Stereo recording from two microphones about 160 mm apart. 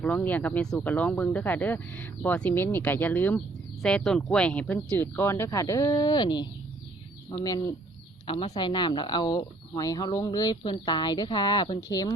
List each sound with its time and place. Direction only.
0.0 s speech: 10° left (ahead or behind); by 6.5 s 30° left (ahead or behind)
8.3 s speech: 35° left (ahead or behind)